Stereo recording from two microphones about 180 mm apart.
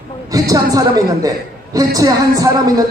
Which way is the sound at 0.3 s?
20° right (ahead or behind).